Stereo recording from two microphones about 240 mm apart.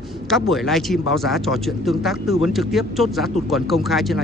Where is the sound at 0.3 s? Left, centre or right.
Centre.